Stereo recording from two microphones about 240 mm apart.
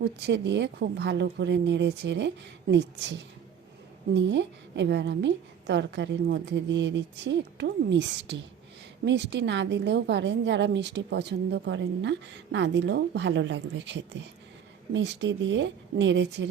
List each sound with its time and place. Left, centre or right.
0.0 s a woman's voice: right